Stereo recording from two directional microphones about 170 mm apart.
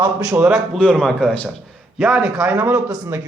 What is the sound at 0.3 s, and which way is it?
A man's voice, 5° right (ahead or behind).